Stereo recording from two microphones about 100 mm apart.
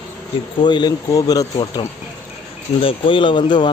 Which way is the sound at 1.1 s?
35° left (ahead or behind).